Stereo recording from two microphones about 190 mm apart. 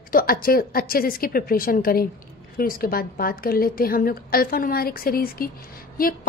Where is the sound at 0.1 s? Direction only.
50° left (ahead or behind).